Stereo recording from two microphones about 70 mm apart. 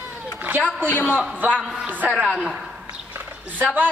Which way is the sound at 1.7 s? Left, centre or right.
Right.